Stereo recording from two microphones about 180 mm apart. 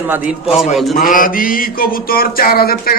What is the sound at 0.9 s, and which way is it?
Mantra, 50° left (ahead or behind).